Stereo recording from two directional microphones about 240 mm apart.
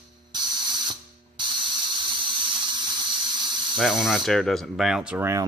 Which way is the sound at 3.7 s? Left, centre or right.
Centre.